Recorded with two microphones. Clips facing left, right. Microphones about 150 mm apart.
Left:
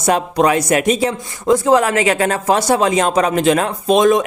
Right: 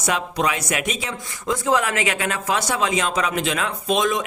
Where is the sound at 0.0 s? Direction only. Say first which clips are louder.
Left 8 dB; 40° left (ahead or behind).